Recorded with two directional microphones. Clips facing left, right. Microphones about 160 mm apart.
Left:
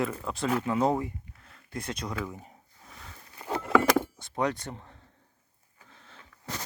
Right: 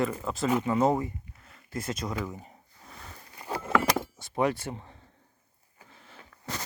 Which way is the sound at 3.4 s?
Centre (ahead or behind).